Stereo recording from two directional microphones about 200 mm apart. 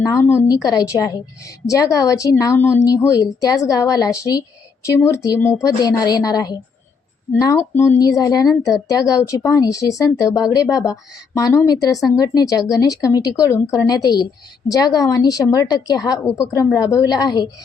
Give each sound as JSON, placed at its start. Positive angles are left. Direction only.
{"t": 0.0, "sound": "a woman's voice", "side_deg": 15}